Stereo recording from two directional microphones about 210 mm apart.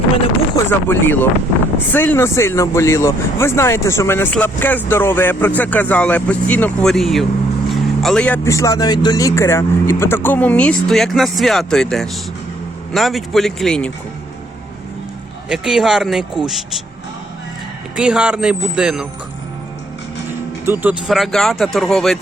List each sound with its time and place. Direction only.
0.5 s speech: 10° left (ahead or behind)
15.4 s speech: 5° right (ahead or behind)
17.9 s speech: 5° right (ahead or behind)
20.7 s speech: 10° right (ahead or behind)
21.1 s speech: centre (ahead or behind)